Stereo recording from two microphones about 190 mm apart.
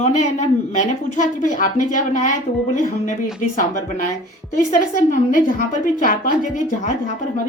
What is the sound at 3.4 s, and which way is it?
A woman's voice, 40° left (ahead or behind).